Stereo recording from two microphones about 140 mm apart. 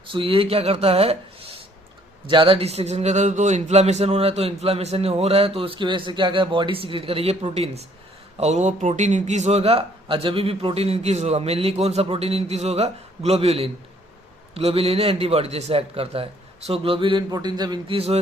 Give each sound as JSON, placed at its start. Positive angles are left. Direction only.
{"t": 0.1, "sound": "speech", "side_deg": -40}